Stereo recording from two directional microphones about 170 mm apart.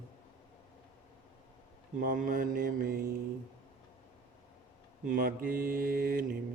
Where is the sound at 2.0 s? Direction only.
55° right (ahead or behind).